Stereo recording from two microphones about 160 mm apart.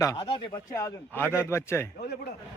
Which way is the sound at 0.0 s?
20° left (ahead or behind).